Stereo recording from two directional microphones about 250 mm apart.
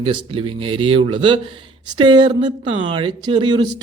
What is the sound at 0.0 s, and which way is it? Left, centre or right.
Speech, right.